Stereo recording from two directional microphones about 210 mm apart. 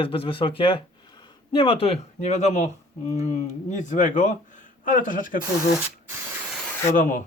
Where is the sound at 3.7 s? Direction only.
35° left (ahead or behind).